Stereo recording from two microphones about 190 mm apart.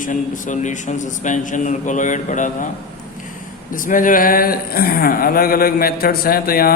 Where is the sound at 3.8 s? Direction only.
45° left (ahead or behind).